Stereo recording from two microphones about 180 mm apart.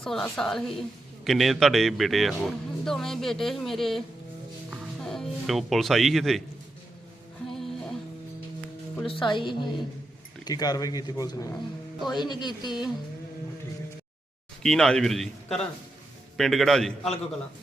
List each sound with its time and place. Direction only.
0.0 s a woman's voice: centre (ahead or behind)
7.5 s music: centre (ahead or behind)
9.0 s speech: 25° left (ahead or behind)
14.6 s a woman's voice: 5° left (ahead or behind)